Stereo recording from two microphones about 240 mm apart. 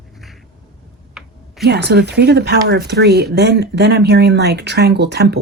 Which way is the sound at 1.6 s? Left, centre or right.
Right.